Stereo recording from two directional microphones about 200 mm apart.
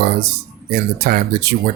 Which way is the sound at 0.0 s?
50° right (ahead or behind).